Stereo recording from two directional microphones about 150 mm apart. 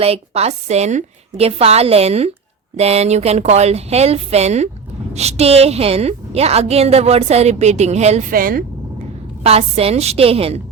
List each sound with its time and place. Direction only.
0.0 s a woman's voice: 45° right (ahead or behind)
8.3 s speech: 70° right (ahead or behind)
9.4 s a woman's voice: 45° right (ahead or behind)